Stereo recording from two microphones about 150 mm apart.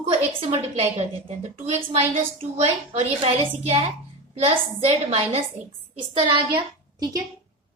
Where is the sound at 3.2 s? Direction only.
40° right (ahead or behind).